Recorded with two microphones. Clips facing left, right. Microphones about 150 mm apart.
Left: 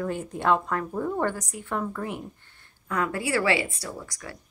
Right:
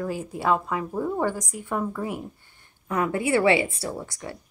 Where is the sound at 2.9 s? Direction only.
20° right (ahead or behind).